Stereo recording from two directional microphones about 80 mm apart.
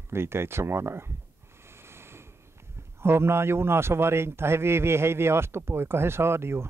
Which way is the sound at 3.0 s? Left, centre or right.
Right.